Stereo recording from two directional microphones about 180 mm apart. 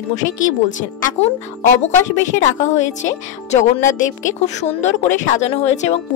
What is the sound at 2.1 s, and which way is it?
Speech, 40° left (ahead or behind).